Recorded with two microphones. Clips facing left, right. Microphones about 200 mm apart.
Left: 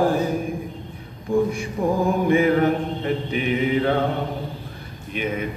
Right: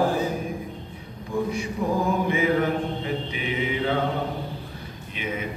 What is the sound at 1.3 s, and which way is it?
Mantra, 50° left (ahead or behind).